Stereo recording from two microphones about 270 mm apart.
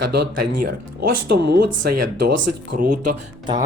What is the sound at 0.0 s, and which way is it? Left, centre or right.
Speech, right.